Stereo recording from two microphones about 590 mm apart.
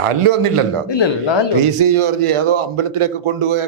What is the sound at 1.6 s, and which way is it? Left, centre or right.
A man's voice, right.